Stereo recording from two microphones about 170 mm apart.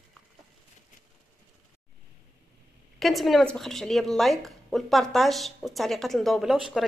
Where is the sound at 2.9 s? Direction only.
Centre (ahead or behind).